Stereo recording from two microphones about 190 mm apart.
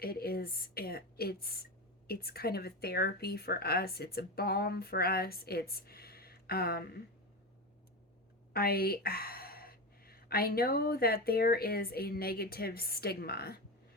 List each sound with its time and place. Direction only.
0.0 s a woman's voice: 50° left (ahead or behind)
8.5 s speech: 55° left (ahead or behind)